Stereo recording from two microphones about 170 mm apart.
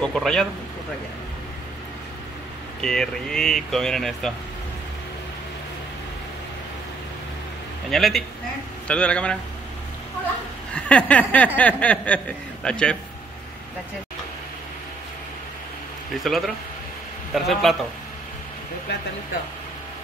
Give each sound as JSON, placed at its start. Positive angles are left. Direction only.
{"t": 0.0, "sound": "speech", "side_deg": 5}
{"t": 2.8, "sound": "speech", "side_deg": 5}
{"t": 7.9, "sound": "speech", "side_deg": 0}
{"t": 8.8, "sound": "a sound", "side_deg": 5}
{"t": 10.7, "sound": "a sound", "side_deg": 5}
{"t": 16.1, "sound": "speech", "side_deg": 0}